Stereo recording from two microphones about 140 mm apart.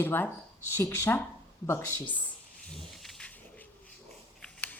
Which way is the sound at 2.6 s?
5° left (ahead or behind).